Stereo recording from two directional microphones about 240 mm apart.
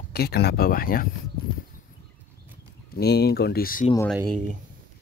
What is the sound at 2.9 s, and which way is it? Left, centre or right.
Speech, left.